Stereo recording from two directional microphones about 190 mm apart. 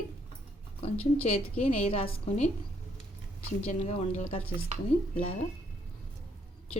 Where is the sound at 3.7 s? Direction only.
35° left (ahead or behind).